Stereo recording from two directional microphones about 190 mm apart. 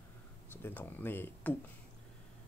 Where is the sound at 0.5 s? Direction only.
10° left (ahead or behind).